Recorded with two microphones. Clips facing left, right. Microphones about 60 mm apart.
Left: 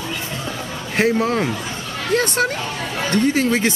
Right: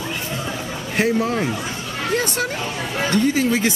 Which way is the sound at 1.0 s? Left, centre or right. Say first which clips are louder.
Left 2 dB; left.